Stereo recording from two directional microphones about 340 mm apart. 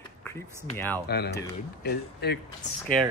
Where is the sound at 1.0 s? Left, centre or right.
Left.